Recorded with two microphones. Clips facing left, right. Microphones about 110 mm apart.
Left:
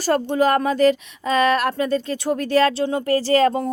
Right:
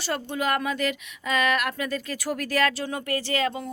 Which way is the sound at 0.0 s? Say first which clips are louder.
Left 10 dB; 45° left (ahead or behind).